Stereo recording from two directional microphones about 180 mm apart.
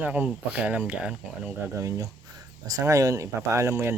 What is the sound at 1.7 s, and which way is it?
Speech, 15° right (ahead or behind).